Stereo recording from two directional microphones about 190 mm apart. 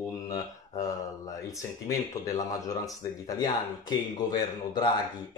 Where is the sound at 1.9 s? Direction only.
20° left (ahead or behind).